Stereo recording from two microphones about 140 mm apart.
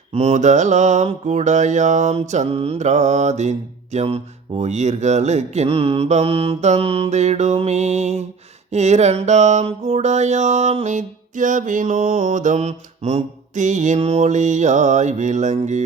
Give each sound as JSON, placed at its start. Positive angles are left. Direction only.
{"t": 0.1, "sound": "mantra", "side_deg": -50}
{"t": 3.9, "sound": "speech", "side_deg": -45}
{"t": 8.7, "sound": "mantra", "side_deg": -55}